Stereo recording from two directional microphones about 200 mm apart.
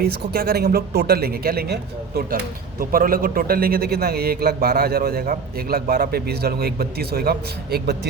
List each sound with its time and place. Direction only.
0.0 s speech: 50° right (ahead or behind)